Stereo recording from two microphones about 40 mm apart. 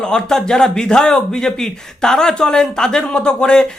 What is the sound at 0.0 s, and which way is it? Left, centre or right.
A man's voice, centre.